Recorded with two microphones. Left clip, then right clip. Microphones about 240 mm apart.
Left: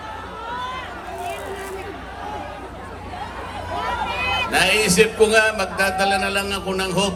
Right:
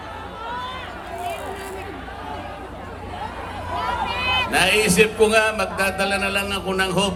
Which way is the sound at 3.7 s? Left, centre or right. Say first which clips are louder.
Even; centre.